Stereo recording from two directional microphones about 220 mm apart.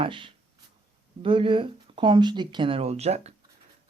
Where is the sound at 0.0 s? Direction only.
25° right (ahead or behind).